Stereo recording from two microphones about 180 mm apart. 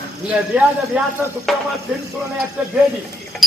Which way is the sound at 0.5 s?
10° right (ahead or behind).